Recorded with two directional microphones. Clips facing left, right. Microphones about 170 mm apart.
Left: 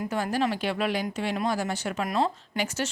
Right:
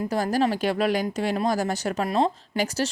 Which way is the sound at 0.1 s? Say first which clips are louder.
Right 4 dB; 40° right (ahead or behind).